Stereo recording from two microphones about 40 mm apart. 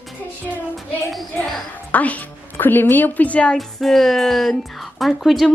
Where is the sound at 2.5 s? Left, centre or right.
Left.